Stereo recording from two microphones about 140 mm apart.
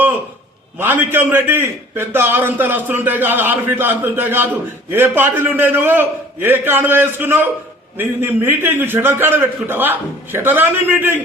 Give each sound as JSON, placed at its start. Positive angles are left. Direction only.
{"t": 0.8, "sound": "a man's voice", "side_deg": -15}